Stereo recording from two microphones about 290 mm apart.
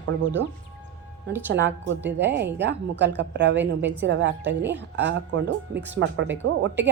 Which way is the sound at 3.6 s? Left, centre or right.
Centre.